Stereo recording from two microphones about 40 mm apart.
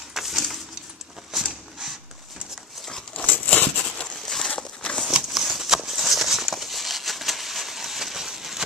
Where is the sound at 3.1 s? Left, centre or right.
Left.